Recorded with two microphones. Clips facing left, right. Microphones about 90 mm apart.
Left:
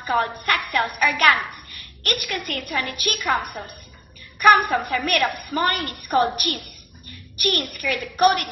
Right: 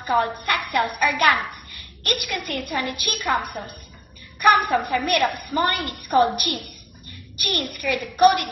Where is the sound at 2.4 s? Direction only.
20° right (ahead or behind).